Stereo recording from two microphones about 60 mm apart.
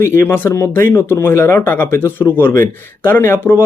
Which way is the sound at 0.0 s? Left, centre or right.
Left.